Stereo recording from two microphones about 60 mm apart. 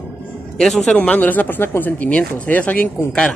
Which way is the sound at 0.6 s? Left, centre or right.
Centre.